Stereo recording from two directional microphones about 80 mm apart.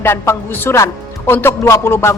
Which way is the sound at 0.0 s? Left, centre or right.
Left.